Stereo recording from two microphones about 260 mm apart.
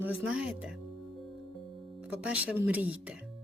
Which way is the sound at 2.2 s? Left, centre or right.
Centre.